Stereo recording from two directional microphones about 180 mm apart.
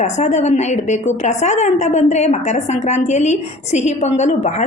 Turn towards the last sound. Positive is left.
turn(degrees=40)  # may be behind; listen again after turning